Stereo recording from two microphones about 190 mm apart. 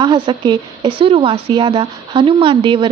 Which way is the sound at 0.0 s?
20° right (ahead or behind).